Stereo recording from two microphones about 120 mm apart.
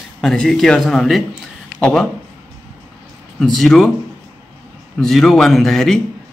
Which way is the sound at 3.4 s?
5° left (ahead or behind).